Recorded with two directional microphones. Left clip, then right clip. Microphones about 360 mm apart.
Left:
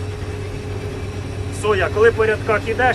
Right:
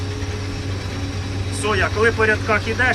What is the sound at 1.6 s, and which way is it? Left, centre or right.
Speech, centre.